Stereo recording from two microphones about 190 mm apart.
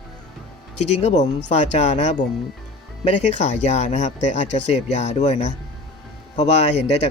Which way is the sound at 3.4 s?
40° left (ahead or behind).